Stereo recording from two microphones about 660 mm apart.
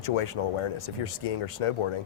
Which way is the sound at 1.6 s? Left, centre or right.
Left.